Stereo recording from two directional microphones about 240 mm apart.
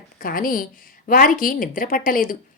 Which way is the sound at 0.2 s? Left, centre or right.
Left.